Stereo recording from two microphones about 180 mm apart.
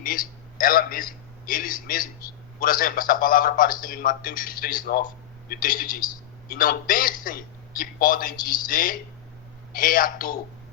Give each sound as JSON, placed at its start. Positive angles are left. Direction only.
{"t": 0.0, "sound": "a man's voice", "side_deg": 50}